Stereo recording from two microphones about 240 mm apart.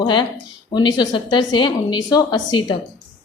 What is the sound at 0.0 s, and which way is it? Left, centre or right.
A woman's voice, centre.